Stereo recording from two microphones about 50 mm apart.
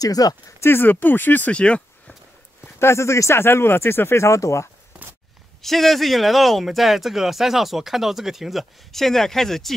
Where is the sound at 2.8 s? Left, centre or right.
Left.